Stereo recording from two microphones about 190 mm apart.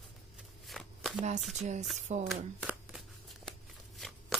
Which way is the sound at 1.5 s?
35° right (ahead or behind).